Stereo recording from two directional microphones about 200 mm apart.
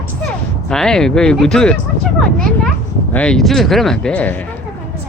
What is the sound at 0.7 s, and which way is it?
Speech, 5° left (ahead or behind).